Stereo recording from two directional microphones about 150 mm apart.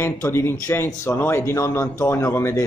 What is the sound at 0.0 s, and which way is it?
A man's voice, 15° left (ahead or behind).